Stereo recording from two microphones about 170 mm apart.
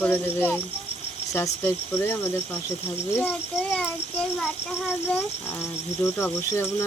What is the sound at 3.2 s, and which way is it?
Insect, 5° left (ahead or behind).